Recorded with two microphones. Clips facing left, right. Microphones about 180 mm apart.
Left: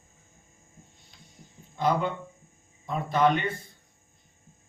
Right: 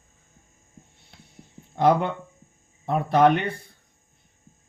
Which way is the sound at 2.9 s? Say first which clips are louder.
Right 5 dB; 60° right (ahead or behind).